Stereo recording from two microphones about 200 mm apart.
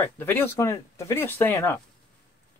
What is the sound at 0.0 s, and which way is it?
Speech, 10° left (ahead or behind).